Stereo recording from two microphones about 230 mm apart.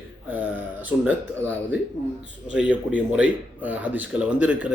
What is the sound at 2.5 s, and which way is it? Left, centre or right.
A man's voice, centre.